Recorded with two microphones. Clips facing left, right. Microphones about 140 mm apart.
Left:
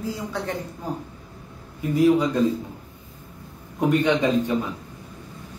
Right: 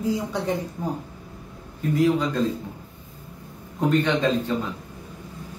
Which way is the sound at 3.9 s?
15° left (ahead or behind).